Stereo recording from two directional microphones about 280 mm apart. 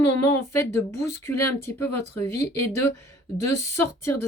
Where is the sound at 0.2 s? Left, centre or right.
Centre.